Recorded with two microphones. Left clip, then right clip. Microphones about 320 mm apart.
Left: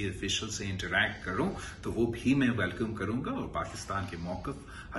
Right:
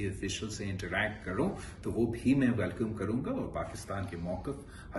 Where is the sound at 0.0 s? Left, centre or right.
Centre.